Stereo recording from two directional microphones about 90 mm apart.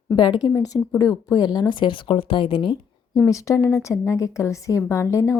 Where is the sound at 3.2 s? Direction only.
35° left (ahead or behind).